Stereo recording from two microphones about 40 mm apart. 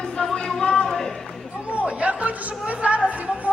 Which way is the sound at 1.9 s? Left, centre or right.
Right.